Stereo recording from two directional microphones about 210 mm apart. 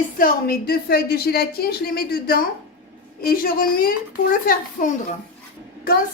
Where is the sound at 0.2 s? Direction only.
45° left (ahead or behind).